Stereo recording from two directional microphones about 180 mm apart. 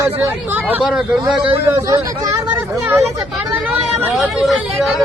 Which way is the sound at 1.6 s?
15° right (ahead or behind).